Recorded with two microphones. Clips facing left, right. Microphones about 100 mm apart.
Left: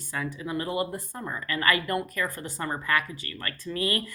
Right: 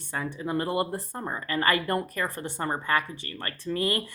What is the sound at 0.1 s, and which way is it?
Speech, 30° right (ahead or behind).